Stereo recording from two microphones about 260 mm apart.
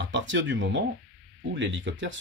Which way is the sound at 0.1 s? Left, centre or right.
Right.